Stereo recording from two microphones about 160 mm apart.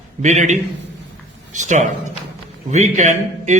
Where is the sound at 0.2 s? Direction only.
45° right (ahead or behind).